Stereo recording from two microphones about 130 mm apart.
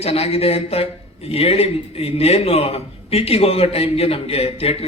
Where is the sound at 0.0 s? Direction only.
50° left (ahead or behind).